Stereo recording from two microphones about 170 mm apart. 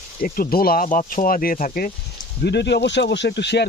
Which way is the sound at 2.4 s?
80° left.